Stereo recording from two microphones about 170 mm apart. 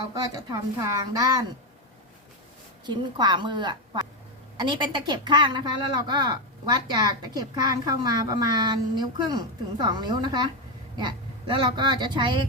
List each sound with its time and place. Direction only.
0.8 s a woman's voice: 20° right (ahead or behind)
2.8 s a woman's voice: 25° right (ahead or behind)